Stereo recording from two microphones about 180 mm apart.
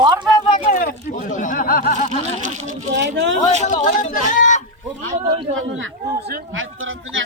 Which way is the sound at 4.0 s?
45° left (ahead or behind).